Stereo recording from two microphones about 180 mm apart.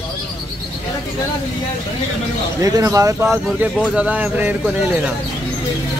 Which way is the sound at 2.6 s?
20° right (ahead or behind).